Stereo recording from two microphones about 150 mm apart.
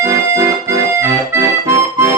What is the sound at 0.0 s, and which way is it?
Music, 20° right (ahead or behind).